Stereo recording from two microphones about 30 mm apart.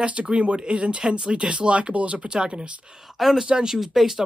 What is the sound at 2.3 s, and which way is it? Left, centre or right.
Speech, right.